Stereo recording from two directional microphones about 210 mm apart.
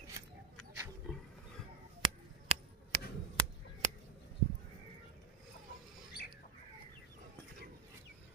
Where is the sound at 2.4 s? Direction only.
30° right (ahead or behind).